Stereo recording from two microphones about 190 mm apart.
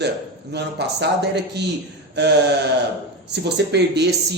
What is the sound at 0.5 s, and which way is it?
Speech, 60° right (ahead or behind).